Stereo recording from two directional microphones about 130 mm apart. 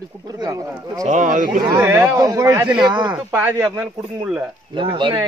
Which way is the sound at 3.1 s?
15° right (ahead or behind).